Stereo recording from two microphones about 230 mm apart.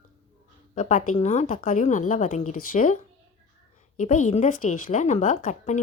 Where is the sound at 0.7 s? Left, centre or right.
Left.